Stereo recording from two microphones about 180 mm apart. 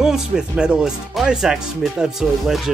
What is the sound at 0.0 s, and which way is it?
Speech, 5° right (ahead or behind).